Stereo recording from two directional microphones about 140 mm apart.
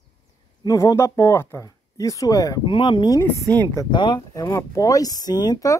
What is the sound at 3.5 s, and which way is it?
Speech, 15° left (ahead or behind).